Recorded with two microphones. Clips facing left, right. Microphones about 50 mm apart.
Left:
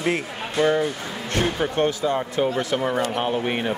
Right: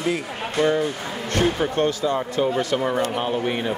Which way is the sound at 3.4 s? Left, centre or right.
Centre.